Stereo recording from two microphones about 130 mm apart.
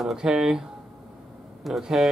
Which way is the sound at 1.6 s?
Centre (ahead or behind).